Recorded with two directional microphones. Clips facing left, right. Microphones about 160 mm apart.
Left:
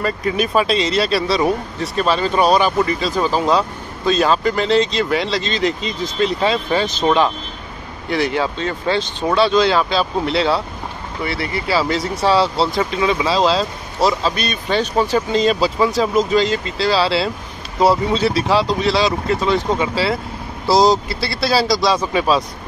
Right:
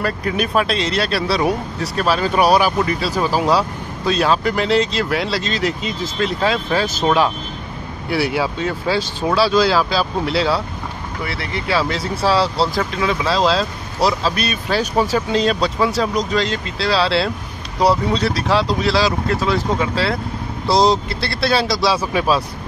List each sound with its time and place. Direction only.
0.0 s speech: centre (ahead or behind)